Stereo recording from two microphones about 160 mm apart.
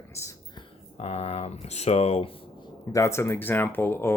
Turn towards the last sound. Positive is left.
turn(degrees=15)  # may be behind; listen again after turning